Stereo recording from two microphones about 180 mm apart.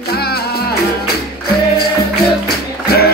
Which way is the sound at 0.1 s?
60° left (ahead or behind).